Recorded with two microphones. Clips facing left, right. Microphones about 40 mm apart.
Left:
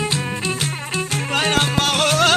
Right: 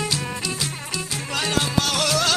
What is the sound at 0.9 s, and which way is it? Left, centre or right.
Music, left.